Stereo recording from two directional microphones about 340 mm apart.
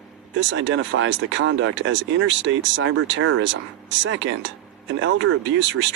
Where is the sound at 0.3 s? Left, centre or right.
Right.